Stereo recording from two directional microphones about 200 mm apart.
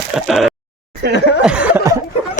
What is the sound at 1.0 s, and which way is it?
Chuckle, 60° right (ahead or behind).